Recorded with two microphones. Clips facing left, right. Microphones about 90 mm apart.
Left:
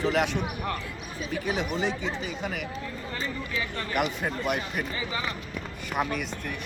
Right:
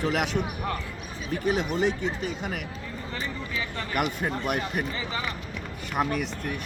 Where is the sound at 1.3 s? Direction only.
45° right (ahead or behind).